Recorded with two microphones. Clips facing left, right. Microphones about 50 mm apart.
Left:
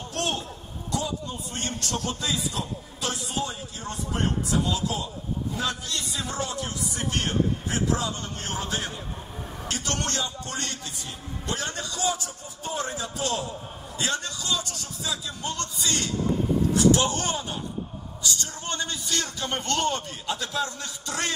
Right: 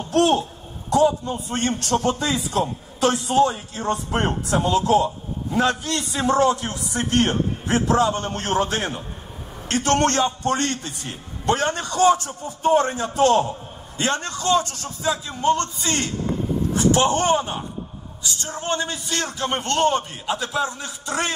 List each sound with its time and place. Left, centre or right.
0.1 s a man's voice: right